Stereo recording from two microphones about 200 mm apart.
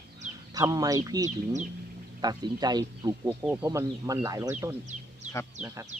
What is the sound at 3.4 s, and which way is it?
Speech, 5° right (ahead or behind).